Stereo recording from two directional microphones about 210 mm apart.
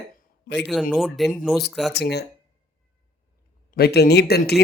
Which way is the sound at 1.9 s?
50° left (ahead or behind).